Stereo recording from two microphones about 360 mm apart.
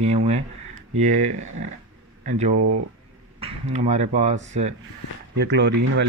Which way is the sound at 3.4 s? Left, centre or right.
Centre.